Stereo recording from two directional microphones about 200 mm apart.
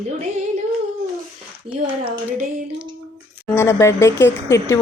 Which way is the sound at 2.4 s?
40° right (ahead or behind).